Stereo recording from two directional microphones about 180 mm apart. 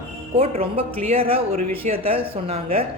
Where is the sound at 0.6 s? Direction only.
30° right (ahead or behind).